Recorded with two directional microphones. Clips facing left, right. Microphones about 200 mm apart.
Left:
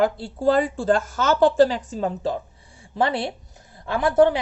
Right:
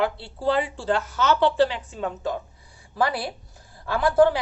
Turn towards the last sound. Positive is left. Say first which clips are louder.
# left 1 dB
turn(degrees=20)  # may be behind; listen again after turning